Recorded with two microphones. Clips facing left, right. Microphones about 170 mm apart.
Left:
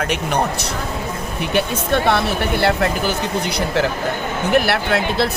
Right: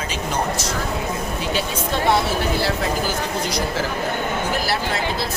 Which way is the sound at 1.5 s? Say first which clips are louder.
Left 7 dB; 60° left (ahead or behind).